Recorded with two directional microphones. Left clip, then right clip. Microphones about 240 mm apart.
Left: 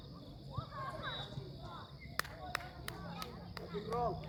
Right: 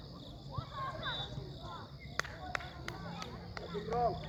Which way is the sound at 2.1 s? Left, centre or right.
Left.